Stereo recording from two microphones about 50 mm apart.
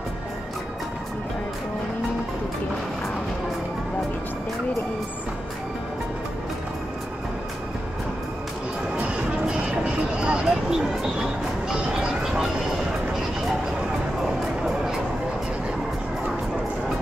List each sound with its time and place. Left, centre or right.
9.5 s music: right
10.4 s a sound: centre
11.7 s music: centre